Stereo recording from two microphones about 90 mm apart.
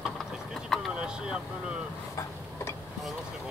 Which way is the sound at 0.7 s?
Centre (ahead or behind).